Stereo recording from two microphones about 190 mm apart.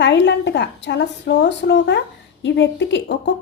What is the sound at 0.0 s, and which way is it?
A woman's voice, 65° left (ahead or behind).